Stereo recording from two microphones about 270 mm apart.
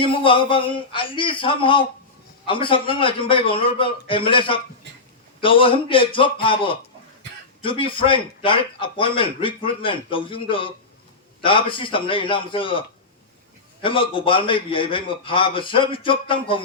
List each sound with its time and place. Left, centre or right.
0.0 s a man's voice: centre
13.8 s a man's voice: centre